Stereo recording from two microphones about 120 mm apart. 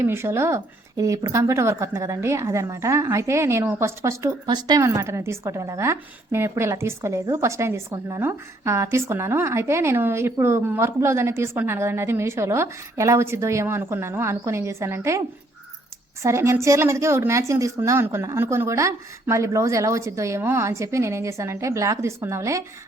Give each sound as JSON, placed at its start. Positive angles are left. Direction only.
{"t": 0.0, "sound": "a woman's voice", "side_deg": -20}
{"t": 16.2, "sound": "a woman's voice", "side_deg": -25}